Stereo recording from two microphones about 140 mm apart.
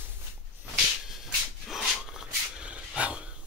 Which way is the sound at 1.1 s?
Centre (ahead or behind).